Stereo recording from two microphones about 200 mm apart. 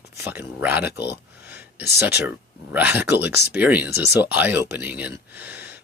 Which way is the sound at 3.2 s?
55° left (ahead or behind).